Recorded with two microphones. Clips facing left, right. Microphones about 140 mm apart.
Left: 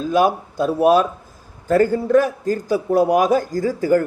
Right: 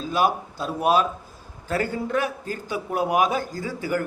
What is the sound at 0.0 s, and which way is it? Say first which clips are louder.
A man's voice: left 6 dB; 50° left (ahead or behind).